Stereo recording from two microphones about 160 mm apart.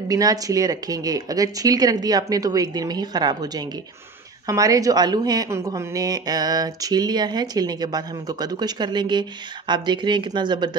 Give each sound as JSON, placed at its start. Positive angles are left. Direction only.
{"t": 0.1, "sound": "a woman's voice", "side_deg": -20}